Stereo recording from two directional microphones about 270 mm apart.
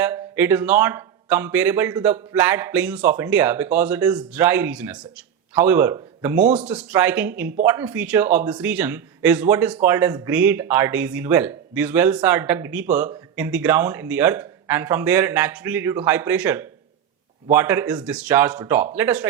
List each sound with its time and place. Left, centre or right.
0.0 s a man's voice: centre